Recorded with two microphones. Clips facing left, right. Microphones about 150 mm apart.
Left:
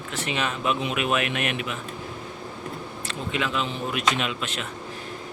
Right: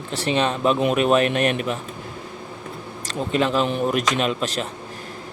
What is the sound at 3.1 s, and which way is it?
Speech, 40° right (ahead or behind).